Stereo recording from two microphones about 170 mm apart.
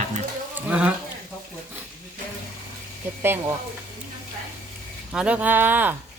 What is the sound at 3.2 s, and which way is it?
Speech, 10° right (ahead or behind).